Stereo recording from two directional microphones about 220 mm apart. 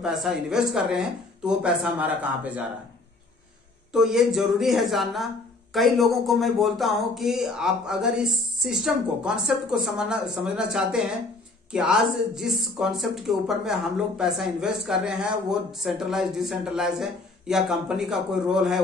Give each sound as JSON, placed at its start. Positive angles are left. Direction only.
{"t": 0.0, "sound": "speech", "side_deg": 0}
{"t": 3.9, "sound": "speech", "side_deg": 0}